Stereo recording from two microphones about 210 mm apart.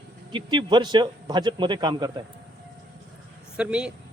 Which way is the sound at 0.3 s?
20° right (ahead or behind).